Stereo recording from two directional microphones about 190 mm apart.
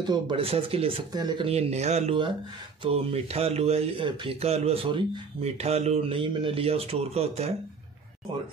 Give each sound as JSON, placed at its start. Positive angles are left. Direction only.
{"t": 0.0, "sound": "speech", "side_deg": -25}